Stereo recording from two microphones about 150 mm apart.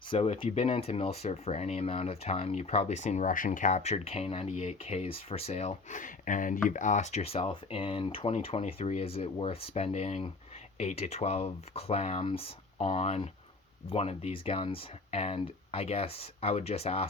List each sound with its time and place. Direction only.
0.1 s speech: 35° left (ahead or behind)